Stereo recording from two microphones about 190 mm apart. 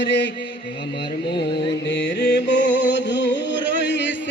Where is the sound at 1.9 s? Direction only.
65° left (ahead or behind).